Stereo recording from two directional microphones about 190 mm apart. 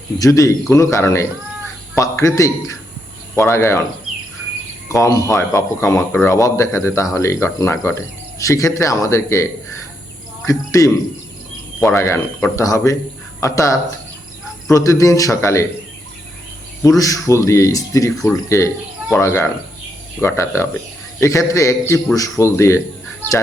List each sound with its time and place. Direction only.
0.2 s speech: 15° left (ahead or behind)
4.9 s speech: 15° left (ahead or behind)
17.0 s speech: 15° left (ahead or behind)